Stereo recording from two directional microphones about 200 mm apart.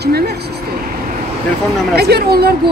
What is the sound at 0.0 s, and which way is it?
Speech, 55° right (ahead or behind).